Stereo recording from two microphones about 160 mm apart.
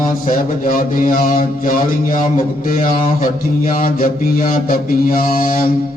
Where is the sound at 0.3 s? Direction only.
60° left (ahead or behind).